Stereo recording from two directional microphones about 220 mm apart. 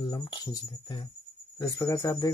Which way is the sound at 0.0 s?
20° left (ahead or behind).